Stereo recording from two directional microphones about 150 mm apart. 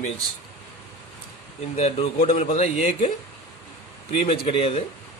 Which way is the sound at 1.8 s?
45° left (ahead or behind).